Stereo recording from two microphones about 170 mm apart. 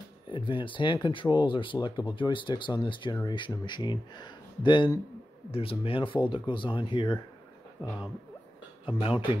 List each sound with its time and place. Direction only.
0.3 s speech: 30° left (ahead or behind)
8.8 s speech: 30° left (ahead or behind)